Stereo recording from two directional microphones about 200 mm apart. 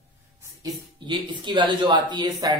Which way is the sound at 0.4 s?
20° right (ahead or behind).